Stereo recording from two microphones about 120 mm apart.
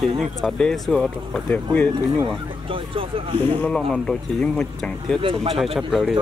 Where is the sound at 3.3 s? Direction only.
10° left (ahead or behind).